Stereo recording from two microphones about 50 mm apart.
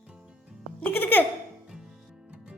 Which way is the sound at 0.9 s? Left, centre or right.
Left.